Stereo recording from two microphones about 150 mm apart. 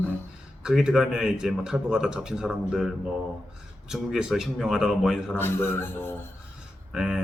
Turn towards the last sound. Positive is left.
turn(degrees=-5)  # may be behind; listen again after turning